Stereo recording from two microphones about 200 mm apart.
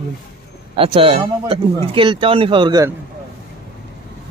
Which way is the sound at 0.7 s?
25° right (ahead or behind).